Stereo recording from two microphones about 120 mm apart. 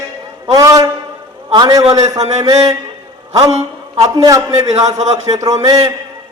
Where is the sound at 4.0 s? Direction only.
30° right (ahead or behind).